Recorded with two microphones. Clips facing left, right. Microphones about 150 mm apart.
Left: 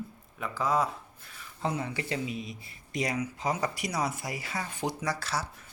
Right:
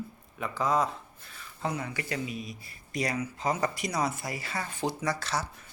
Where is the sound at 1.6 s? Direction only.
25° left (ahead or behind).